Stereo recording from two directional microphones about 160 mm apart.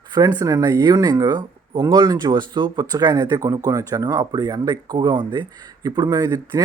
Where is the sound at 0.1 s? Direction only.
25° right (ahead or behind).